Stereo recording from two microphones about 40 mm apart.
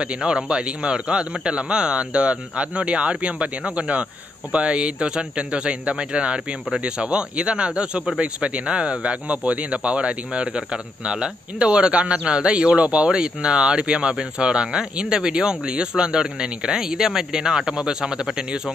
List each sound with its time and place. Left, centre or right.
0.5 s speech: right
13.2 s speech: right